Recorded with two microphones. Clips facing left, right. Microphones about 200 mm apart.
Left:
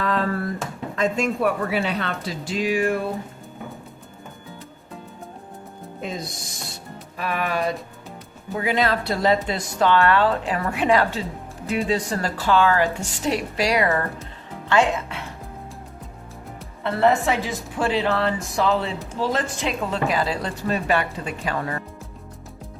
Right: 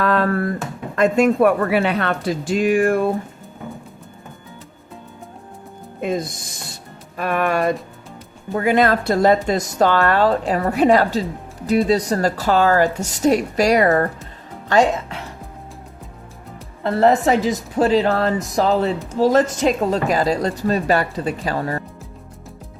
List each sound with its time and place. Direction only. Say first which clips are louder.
0.0 s a sound: right 5 dB; 65° right (ahead or behind)
0.9 s speech: right 8 dB; 60° right (ahead or behind)
6.0 s a woman's voice: right 9 dB; 55° right (ahead or behind)
16.8 s a woman's voice: right 4 dB; 40° right (ahead or behind)